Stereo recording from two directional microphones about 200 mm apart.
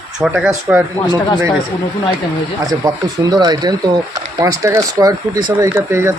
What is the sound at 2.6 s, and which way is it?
Speech, 20° right (ahead or behind).